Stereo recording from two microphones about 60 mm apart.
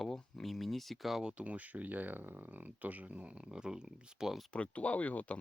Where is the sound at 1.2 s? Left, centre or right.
Centre.